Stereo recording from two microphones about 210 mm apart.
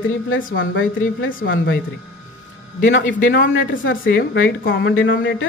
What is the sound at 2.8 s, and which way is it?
Speech, 60° left (ahead or behind).